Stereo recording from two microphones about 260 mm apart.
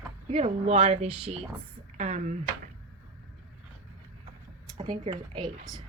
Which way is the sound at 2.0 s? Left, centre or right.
Right.